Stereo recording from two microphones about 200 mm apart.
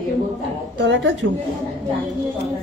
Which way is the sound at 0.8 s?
65° right (ahead or behind).